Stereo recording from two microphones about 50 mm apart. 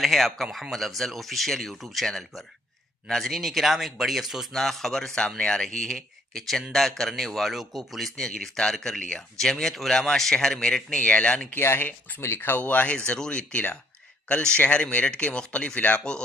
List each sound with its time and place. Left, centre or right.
0.0 s speech: centre
4.5 s speech: centre
9.4 s speech: centre
10.9 s speech: left
11.5 s speech: left
12.5 s speech: left
13.0 s speech: centre
13.5 s speech: left